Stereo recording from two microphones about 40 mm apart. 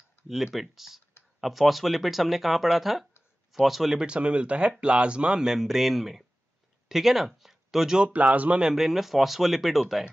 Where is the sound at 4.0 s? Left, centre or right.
Right; by 8.0 s centre.